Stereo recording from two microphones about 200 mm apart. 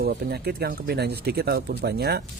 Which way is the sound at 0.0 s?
55° right (ahead or behind).